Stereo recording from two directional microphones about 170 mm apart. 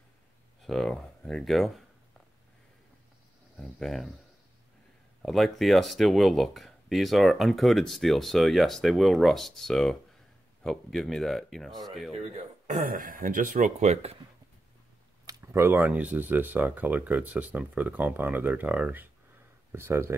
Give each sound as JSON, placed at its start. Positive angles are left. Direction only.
{"t": 0.6, "sound": "speech", "side_deg": 0}
{"t": 3.5, "sound": "speech", "side_deg": 0}
{"t": 5.2, "sound": "speech", "side_deg": 0}
{"t": 12.1, "sound": "speech", "side_deg": -45}
{"t": 15.2, "sound": "speech", "side_deg": -15}